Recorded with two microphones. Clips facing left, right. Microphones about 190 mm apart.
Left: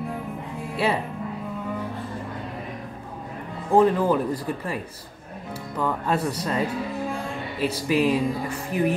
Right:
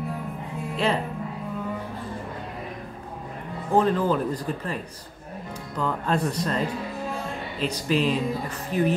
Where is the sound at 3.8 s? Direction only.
10° left (ahead or behind).